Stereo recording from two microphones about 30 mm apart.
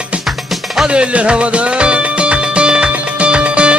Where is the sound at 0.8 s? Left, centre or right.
Right.